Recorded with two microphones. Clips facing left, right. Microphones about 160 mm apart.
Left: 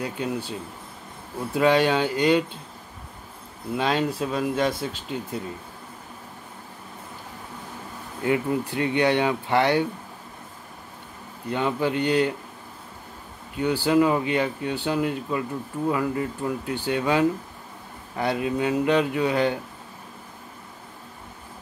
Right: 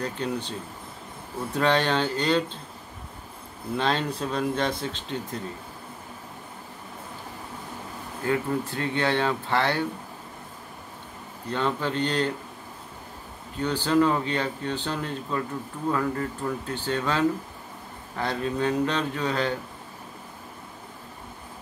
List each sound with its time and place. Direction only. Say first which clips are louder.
0.0 s speech: left 1 dB; 10° left (ahead or behind)
3.7 s speech: left 2 dB; 10° left (ahead or behind)
8.2 s speech: left 3 dB; 15° left (ahead or behind)
11.4 s speech: left 3 dB; 15° left (ahead or behind)
13.6 s speech: left 2 dB; 10° left (ahead or behind)